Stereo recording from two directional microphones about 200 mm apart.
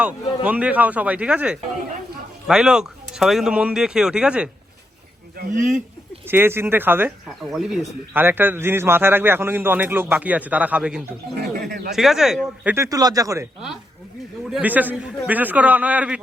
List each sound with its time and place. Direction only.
0.4 s a man's voice: 5° right (ahead or behind)
5.4 s speech: 40° right (ahead or behind)
6.2 s a man's voice: 10° right (ahead or behind)
12.6 s a man's voice: 15° right (ahead or behind)
14.5 s a man's voice: 10° right (ahead or behind)